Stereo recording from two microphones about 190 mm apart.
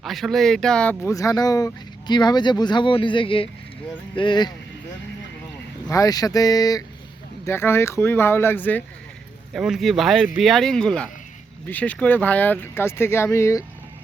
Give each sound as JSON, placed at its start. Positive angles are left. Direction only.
{"t": 0.0, "sound": "speech", "side_deg": 0}
{"t": 5.9, "sound": "speech", "side_deg": 20}
{"t": 9.5, "sound": "speech", "side_deg": 0}